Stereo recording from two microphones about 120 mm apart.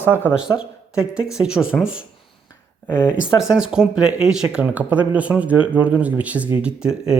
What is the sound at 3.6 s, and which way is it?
Speech, 5° right (ahead or behind).